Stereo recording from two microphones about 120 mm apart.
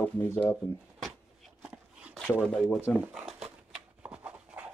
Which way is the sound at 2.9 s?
5° left (ahead or behind).